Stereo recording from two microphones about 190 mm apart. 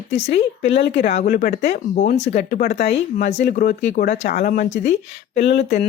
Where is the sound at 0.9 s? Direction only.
35° left (ahead or behind).